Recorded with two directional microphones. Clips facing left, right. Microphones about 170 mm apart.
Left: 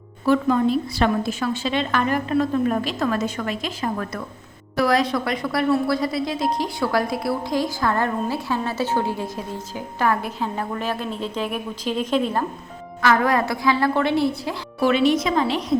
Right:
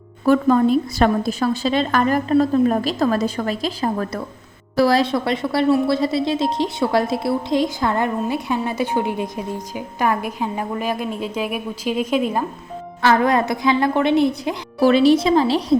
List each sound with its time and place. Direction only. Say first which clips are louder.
0.3 s a woman's voice: right 4 dB; 45° right (ahead or behind); by 12.5 s 10° right (ahead or behind)
13.0 s a woman's voice: right 2 dB; 25° right (ahead or behind)
14.8 s a woman's voice: right 5 dB; 35° right (ahead or behind)